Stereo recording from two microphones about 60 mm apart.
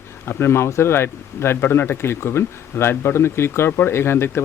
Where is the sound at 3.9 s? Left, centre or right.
Left.